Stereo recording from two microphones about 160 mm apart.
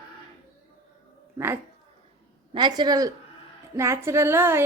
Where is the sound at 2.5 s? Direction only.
30° right (ahead or behind).